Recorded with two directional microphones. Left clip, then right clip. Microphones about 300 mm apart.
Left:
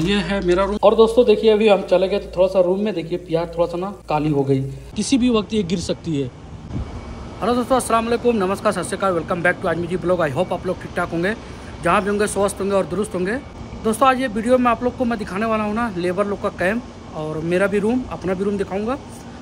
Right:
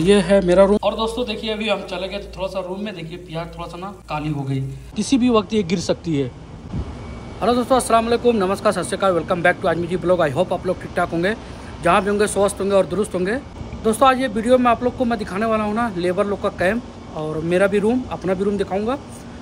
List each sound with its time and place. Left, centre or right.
0.0 s speech: centre
0.9 s speech: right
1.2 s speech: centre
5.8 s speech: centre
7.3 s speech: centre